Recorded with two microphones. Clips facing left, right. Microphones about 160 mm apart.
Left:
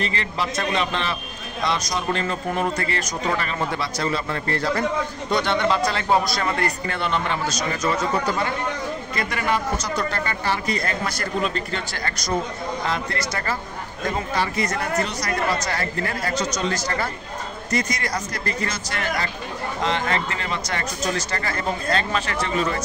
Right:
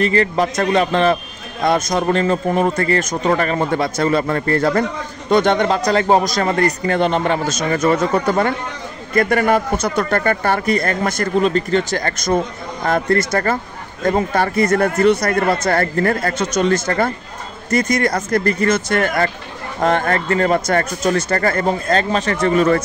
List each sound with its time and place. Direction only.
0.0 s a man's voice: 45° right (ahead or behind)